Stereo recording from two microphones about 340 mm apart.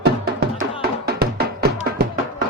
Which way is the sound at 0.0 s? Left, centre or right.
Right.